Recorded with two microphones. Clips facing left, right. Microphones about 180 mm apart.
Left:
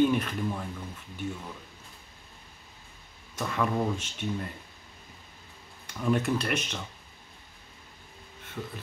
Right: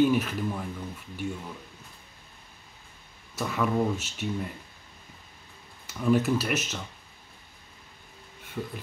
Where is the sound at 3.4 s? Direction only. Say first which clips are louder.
Right 2 dB; 5° right (ahead or behind).